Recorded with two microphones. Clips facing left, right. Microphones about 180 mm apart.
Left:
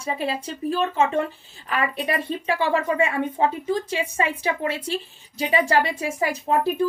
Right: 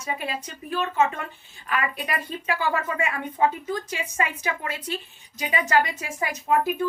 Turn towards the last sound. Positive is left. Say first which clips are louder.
# left 2 dB
turn(degrees=35)  # may be behind; listen again after turning